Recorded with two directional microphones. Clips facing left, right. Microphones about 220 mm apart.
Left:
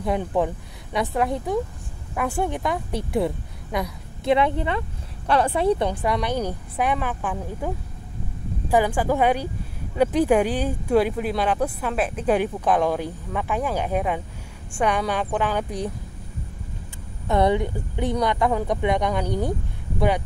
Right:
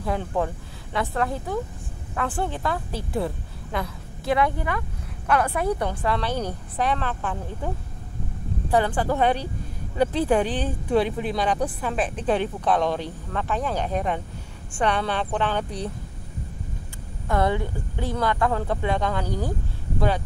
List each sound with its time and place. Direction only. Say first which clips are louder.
0.2 s speech: left 3 dB; 20° left (ahead or behind)
17.3 s speech: left 3 dB; 20° left (ahead or behind)